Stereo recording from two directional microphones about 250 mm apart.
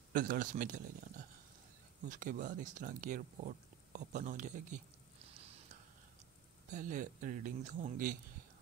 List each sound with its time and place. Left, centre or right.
0.1 s speech: right
2.0 s speech: right
6.7 s speech: right